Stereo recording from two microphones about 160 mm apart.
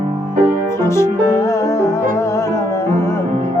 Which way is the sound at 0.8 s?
15° left (ahead or behind).